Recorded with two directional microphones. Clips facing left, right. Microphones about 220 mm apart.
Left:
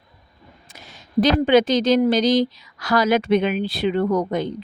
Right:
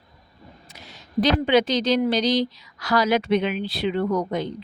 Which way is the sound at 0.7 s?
50° left (ahead or behind).